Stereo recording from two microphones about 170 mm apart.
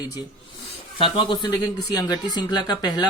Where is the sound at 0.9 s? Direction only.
30° left (ahead or behind).